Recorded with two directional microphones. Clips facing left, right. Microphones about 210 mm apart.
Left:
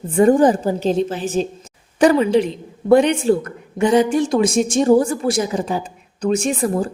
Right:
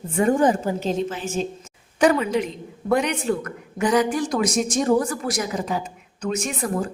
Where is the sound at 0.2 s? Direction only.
35° left (ahead or behind).